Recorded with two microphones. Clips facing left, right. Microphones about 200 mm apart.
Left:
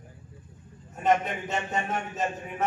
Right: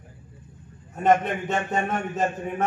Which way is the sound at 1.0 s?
55° right (ahead or behind).